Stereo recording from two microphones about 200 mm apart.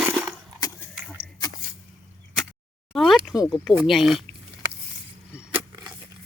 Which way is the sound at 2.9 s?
Centre (ahead or behind).